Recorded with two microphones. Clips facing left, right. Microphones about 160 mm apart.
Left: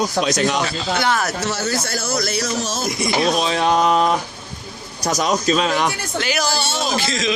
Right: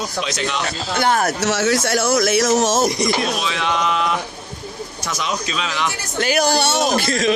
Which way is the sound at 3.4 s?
40° left (ahead or behind).